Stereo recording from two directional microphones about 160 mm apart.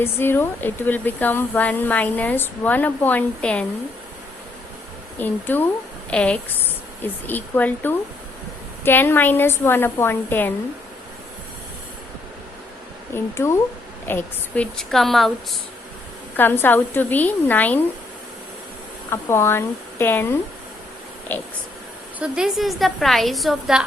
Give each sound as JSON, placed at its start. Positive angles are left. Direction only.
{"t": 0.0, "sound": "speech", "side_deg": 15}
{"t": 5.2, "sound": "speech", "side_deg": 10}
{"t": 13.1, "sound": "a woman's voice", "side_deg": 15}
{"t": 16.4, "sound": "speech", "side_deg": 10}
{"t": 19.1, "sound": "speech", "side_deg": 15}
{"t": 22.2, "sound": "a woman's voice", "side_deg": -5}